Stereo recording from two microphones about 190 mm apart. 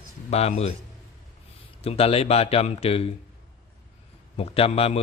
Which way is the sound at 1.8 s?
30° left (ahead or behind).